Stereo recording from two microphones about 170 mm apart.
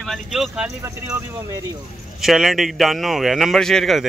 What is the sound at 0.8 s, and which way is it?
Speech, 15° right (ahead or behind).